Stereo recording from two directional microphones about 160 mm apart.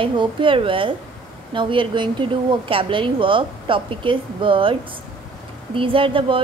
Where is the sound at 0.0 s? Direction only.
30° right (ahead or behind).